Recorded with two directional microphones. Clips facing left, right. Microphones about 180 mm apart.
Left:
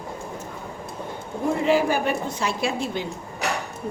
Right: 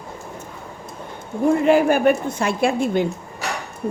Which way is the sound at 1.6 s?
55° right (ahead or behind).